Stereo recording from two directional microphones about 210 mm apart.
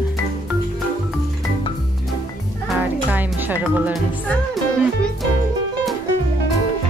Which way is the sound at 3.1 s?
10° right (ahead or behind).